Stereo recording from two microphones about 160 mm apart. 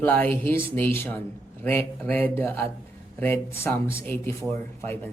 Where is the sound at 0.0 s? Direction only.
10° left (ahead or behind).